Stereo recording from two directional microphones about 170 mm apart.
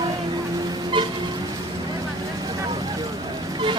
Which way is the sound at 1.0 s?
25° right (ahead or behind).